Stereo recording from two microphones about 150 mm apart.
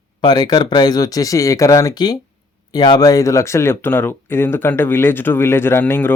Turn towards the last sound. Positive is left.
turn(degrees=15)  # may be behind; listen again after turning